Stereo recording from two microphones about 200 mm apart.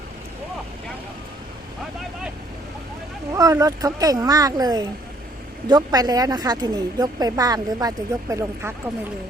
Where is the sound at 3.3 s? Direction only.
15° right (ahead or behind).